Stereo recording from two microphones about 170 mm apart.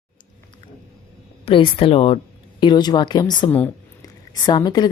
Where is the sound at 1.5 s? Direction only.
30° left (ahead or behind).